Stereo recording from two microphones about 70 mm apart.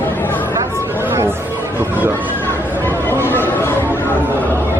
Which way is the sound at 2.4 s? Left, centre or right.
Left.